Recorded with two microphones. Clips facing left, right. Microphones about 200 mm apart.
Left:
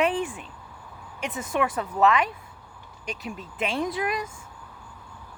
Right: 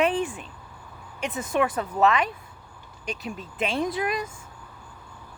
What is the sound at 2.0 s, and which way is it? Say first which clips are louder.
Speech: even; 25° right (ahead or behind).